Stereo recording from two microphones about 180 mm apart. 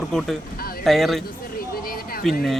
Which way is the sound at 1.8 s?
55° left (ahead or behind).